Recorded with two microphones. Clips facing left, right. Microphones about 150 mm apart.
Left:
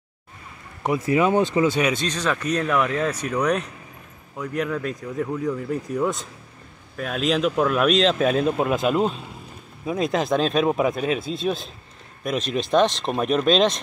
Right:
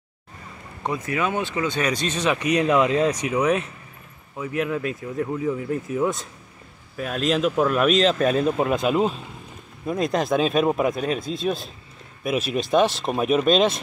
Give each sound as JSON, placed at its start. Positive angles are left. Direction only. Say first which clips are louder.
{"t": 1.0, "sound": "speech", "louder": "left 7 dB", "side_deg": 25}
{"t": 1.7, "sound": "speech", "louder": "left 2 dB", "side_deg": 5}
{"t": 2.0, "sound": "speech", "louder": "right 2 dB", "side_deg": -10}